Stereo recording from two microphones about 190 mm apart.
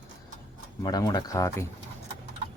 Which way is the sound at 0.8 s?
20° left (ahead or behind).